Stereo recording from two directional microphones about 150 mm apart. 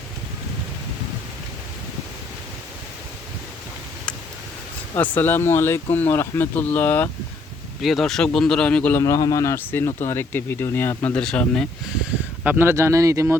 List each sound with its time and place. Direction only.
4.9 s speech: 10° left (ahead or behind)
7.8 s speech: centre (ahead or behind)
9.0 s speech: 25° left (ahead or behind); by 11.6 s 5° left (ahead or behind)
12.5 s speech: 15° right (ahead or behind)